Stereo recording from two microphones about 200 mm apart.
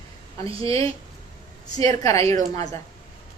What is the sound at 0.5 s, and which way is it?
Speech, 30° right (ahead or behind).